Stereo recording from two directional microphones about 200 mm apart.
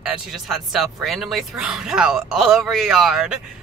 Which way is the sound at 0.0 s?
5° right (ahead or behind).